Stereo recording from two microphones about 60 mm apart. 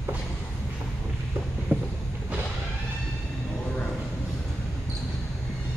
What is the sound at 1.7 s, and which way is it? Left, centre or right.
Vehicle, right.